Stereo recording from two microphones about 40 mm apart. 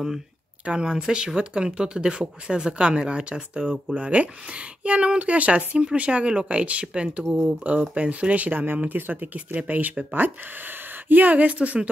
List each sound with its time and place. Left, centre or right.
0.7 s speech: right
11.1 s speech: right